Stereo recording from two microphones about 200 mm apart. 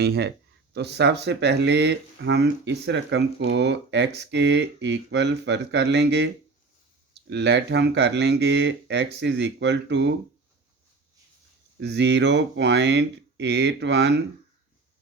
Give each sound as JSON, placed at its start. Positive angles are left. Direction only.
{"t": 0.0, "sound": "speech", "side_deg": -55}
{"t": 11.8, "sound": "speech", "side_deg": -60}